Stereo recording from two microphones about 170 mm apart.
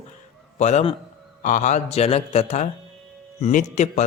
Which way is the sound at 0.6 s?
40° left (ahead or behind).